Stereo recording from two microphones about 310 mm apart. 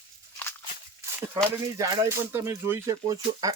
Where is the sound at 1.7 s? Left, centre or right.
Centre.